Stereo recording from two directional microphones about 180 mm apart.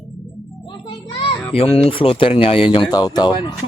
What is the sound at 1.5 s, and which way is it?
Speech, 30° left (ahead or behind).